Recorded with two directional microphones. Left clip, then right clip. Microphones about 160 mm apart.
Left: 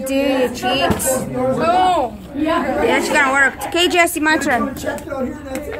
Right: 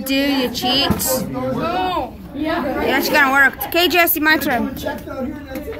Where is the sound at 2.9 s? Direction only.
5° right (ahead or behind).